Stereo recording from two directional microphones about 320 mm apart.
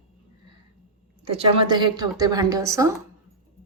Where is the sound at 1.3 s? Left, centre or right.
Centre.